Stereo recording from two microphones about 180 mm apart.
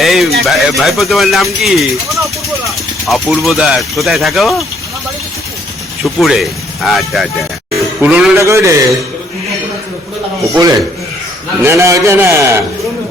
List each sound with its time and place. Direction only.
0.0 s speech: centre (ahead or behind)
6.1 s speech: centre (ahead or behind)
8.0 s a man's voice: 10° right (ahead or behind)
10.5 s a man's voice: 20° right (ahead or behind)